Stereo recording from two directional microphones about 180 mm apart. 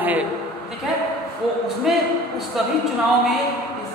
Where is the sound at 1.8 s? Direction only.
Centre (ahead or behind).